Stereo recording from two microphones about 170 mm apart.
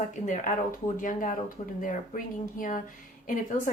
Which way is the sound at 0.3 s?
50° left (ahead or behind).